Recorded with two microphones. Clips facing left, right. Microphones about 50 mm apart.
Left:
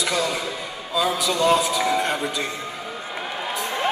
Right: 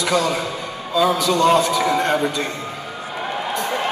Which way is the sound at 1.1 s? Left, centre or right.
Centre.